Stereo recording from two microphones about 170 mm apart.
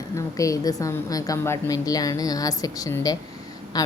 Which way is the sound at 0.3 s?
20° left (ahead or behind).